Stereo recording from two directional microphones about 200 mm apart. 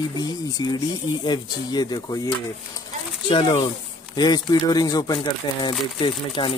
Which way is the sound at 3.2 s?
25° left (ahead or behind).